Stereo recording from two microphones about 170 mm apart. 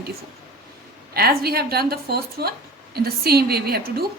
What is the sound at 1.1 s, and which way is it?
A woman's voice, 65° right (ahead or behind).